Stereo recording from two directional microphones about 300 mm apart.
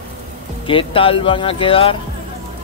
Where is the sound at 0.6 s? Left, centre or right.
Centre.